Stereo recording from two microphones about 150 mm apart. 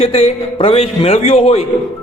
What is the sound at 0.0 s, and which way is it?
Speech, 40° left (ahead or behind).